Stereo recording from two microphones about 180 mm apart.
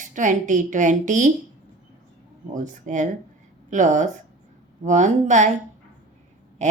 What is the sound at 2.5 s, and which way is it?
A woman's voice, 45° right (ahead or behind).